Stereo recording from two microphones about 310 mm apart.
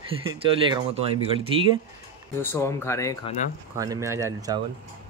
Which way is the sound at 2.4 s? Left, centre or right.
Centre.